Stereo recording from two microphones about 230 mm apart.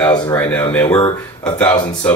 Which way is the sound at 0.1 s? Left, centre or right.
Centre.